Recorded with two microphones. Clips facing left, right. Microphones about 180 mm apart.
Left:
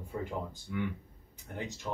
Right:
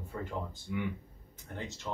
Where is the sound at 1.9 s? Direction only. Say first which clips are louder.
Left 1 dB; 15° left (ahead or behind).